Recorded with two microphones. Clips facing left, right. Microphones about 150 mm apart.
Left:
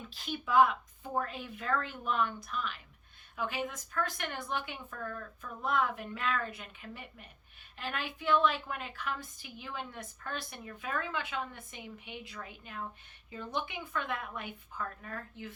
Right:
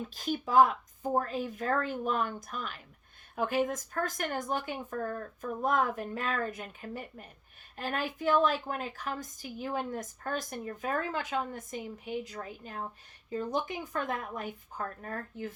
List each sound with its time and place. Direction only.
0.0 s a woman's voice: 40° right (ahead or behind)